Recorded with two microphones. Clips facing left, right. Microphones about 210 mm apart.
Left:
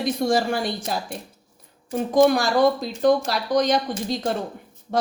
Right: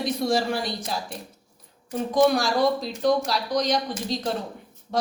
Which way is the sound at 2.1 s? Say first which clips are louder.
Left 3 dB; 50° left (ahead or behind).